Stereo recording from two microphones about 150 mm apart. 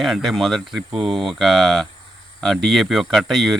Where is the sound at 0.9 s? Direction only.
35° right (ahead or behind).